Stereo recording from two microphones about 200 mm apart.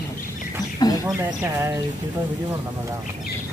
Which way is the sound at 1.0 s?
15° right (ahead or behind).